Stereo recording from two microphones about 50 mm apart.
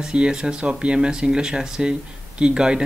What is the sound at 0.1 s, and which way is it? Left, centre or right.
Speech, centre.